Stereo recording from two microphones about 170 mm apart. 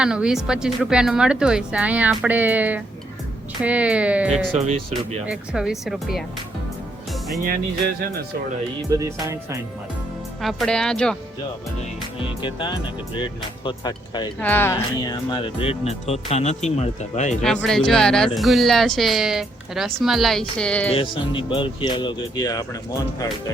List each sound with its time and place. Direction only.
0.0 s speech: 5° right (ahead or behind)
4.5 s speech: 40° right (ahead or behind)
5.2 s speech: 5° right (ahead or behind)
9.0 s music: 20° right (ahead or behind)
10.4 s speech: centre (ahead or behind)
12.4 s speech: 30° left (ahead or behind)
14.4 s speech: 10° left (ahead or behind)
14.9 s speech: 25° left (ahead or behind); by 17.3 s 45° left (ahead or behind)
17.4 s speech: 5° left (ahead or behind)
20.9 s speech: 30° left (ahead or behind)